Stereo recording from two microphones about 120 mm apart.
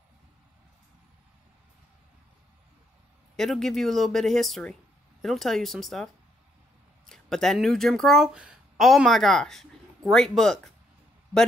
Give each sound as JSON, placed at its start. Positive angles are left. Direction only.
{"t": 3.3, "sound": "speech", "side_deg": 5}
{"t": 7.1, "sound": "speech", "side_deg": 5}